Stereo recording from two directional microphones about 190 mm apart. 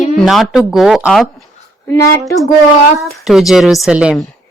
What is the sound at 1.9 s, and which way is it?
Speech, 15° left (ahead or behind).